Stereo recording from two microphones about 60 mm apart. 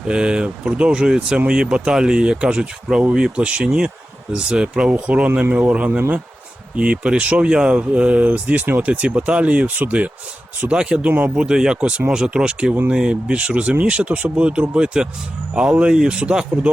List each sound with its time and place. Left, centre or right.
0.1 s speech: centre